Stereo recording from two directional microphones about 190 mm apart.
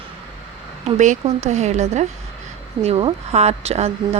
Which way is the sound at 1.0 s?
40° right (ahead or behind).